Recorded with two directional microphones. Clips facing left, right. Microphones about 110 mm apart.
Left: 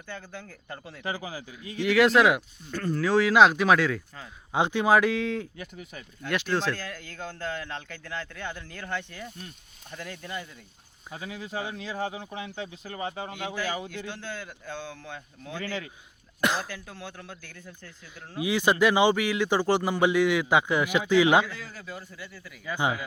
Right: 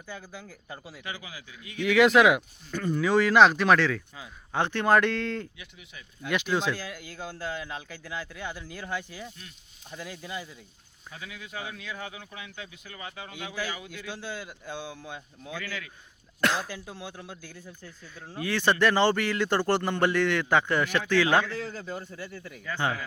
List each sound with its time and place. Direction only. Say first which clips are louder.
0.1 s speech: left 1 dB; 5° right (ahead or behind)
1.0 s speech: left 9 dB; 40° left (ahead or behind)
1.8 s a man's voice: right 1 dB; centre (ahead or behind)
5.5 s speech: left 7 dB; 45° left (ahead or behind)
6.2 s speech: even; centre (ahead or behind)
11.1 s speech: left 5 dB; 35° left (ahead or behind)
14.1 s speech: even; 15° right (ahead or behind)
15.5 s speech: left 4 dB; 30° left (ahead or behind)
16.4 s a man's voice: even; 5° left (ahead or behind)
16.6 s speech: right 1 dB; 15° right (ahead or behind)
18.3 s a man's voice: left 2 dB; 15° left (ahead or behind)
21.5 s speech: right 5 dB; 30° right (ahead or behind)
22.6 s a man's voice: left 2 dB; 15° left (ahead or behind)